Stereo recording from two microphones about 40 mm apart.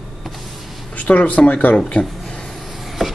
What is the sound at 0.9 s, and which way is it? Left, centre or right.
Speech, left.